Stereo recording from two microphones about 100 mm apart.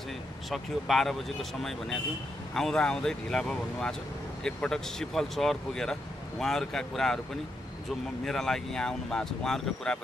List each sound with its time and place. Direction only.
0.5 s speech: centre (ahead or behind)
8.3 s speech: 5° left (ahead or behind)